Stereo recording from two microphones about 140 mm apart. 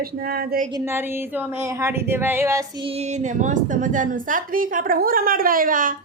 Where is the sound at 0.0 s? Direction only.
90° right.